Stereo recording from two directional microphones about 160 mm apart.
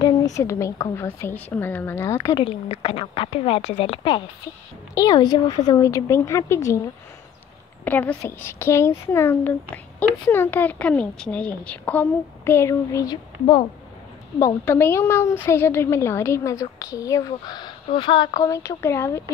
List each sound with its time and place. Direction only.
0.0 s speech: 20° left (ahead or behind)
2.3 s a woman's voice: 35° left (ahead or behind); by 6.8 s 20° left (ahead or behind)
7.8 s speech: 10° left (ahead or behind); by 13.7 s 30° left (ahead or behind)
14.4 s speech: 15° left (ahead or behind)